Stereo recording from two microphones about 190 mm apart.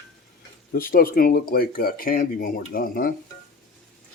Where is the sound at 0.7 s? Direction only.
50° left (ahead or behind).